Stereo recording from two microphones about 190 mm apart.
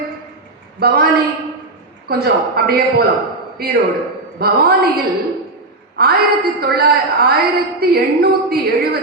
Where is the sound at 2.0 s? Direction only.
55° right (ahead or behind).